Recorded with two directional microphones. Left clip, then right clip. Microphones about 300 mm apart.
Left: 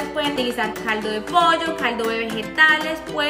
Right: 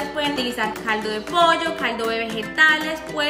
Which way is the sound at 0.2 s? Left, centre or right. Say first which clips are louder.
Left 1 dB; centre.